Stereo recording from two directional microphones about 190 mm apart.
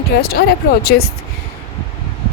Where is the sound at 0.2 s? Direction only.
55° left (ahead or behind).